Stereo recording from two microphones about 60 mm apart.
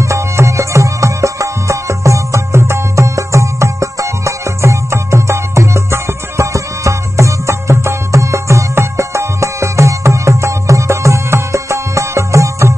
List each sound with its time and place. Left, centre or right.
0.0 s music: right